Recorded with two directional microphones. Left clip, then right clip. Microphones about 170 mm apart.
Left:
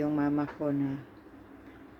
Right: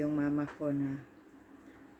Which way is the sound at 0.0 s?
15° right (ahead or behind).